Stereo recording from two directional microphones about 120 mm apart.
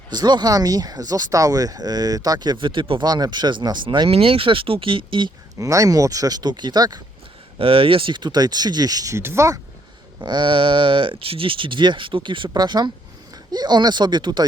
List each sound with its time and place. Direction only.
0.1 s speech: 35° right (ahead or behind)
3.0 s speech: 35° right (ahead or behind)
4.1 s speech: 50° right (ahead or behind)
5.5 s speech: 25° right (ahead or behind)
7.6 s speech: 50° right (ahead or behind); by 9.6 s 20° right (ahead or behind)
10.2 s speech: 40° right (ahead or behind)